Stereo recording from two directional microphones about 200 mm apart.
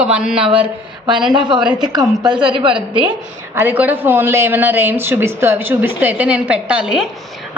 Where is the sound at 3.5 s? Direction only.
10° right (ahead or behind).